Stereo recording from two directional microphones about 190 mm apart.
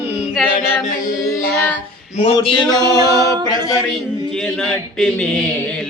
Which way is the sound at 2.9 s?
20° right (ahead or behind).